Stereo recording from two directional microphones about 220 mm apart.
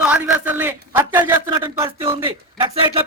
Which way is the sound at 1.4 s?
20° right (ahead or behind).